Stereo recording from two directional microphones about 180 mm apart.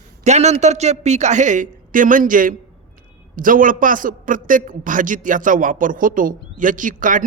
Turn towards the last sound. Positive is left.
turn(degrees=-45)  # may be behind; listen again after turning